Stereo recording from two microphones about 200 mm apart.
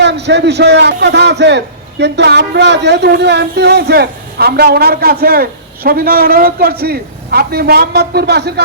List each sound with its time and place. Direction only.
0.0 s a man's voice: 60° right (ahead or behind)